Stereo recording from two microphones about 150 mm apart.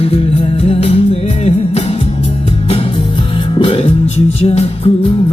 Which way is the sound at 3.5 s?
40° left (ahead or behind).